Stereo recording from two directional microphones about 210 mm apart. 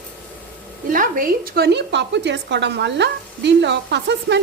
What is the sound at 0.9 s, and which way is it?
A woman's voice, 40° right (ahead or behind).